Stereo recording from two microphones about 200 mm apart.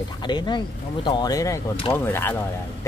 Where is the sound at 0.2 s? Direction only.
20° left (ahead or behind).